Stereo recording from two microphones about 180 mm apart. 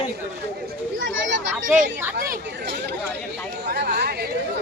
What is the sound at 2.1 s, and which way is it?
Speech, 55° right (ahead or behind).